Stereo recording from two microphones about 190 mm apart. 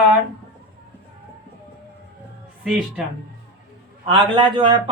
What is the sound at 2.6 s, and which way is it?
Speech, 5° right (ahead or behind).